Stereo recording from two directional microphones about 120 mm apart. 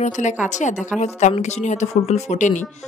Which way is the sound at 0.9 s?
75° left (ahead or behind).